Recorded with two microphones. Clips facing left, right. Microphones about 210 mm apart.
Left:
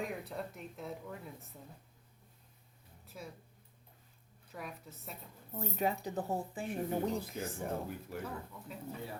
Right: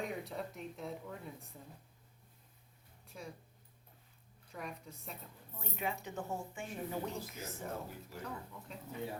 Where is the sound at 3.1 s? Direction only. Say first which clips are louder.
Even; centre (ahead or behind).